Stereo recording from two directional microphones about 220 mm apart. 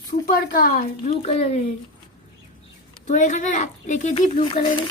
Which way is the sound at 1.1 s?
30° left (ahead or behind).